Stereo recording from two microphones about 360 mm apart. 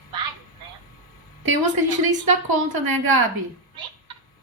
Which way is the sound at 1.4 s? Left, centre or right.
Right.